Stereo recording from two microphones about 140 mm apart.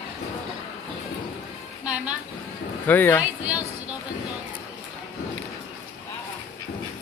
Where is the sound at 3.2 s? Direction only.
10° right (ahead or behind).